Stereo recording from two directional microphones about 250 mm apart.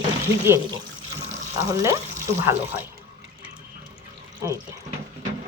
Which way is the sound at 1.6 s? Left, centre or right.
Centre.